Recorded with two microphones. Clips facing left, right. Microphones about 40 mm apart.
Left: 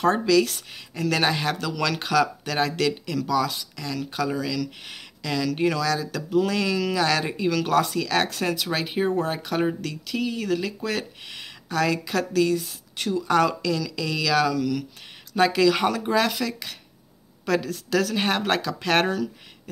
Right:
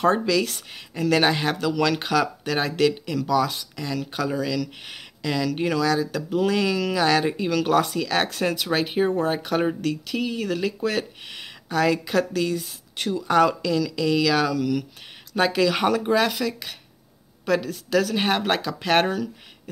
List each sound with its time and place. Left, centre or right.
0.3 s speech: right